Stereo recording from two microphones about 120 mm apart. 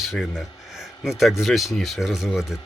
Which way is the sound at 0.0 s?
5° right (ahead or behind).